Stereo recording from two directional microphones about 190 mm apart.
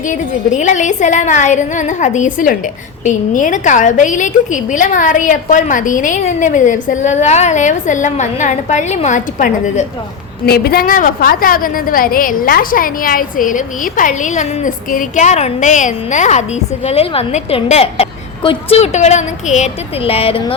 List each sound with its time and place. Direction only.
0.1 s a woman's voice: 40° left (ahead or behind)
10.4 s a woman's voice: 55° left (ahead or behind); by 20.5 s 30° left (ahead or behind)